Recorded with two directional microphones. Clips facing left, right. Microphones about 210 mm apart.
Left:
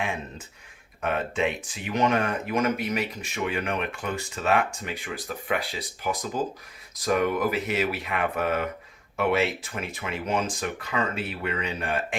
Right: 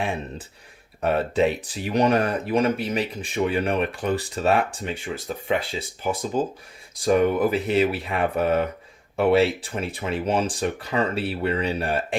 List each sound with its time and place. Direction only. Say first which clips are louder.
0.0 s speech: right 4 dB; 35° right (ahead or behind)